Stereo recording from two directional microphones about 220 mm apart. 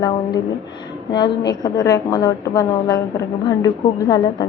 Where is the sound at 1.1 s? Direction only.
20° left (ahead or behind).